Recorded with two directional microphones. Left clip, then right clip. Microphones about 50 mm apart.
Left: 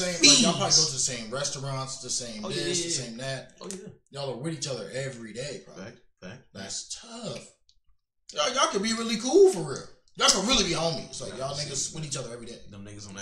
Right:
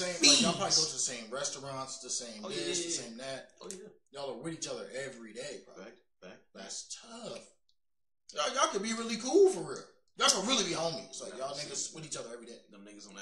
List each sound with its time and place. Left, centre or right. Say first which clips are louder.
0.2 s a man's voice: left 6 dB; left
0.9 s a man's voice: left 6 dB; right
5.8 s speech: left 6 dB; centre
6.5 s a man's voice: left 7 dB; right
12.7 s a man's voice: left 7 dB; centre